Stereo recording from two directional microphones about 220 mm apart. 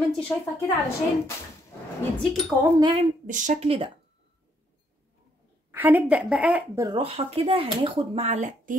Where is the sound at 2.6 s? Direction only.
20° right (ahead or behind).